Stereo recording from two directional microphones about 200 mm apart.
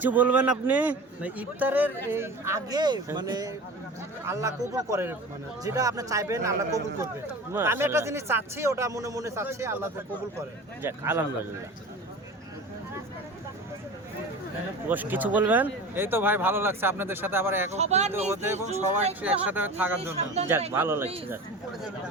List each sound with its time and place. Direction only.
0.0 s a man's voice: 10° right (ahead or behind)
14.8 s a man's voice: 10° right (ahead or behind)
17.7 s speech: 35° right (ahead or behind)
18.1 s a man's voice: 10° right (ahead or behind)
20.1 s speech: 35° right (ahead or behind)
20.7 s a man's voice: 10° right (ahead or behind)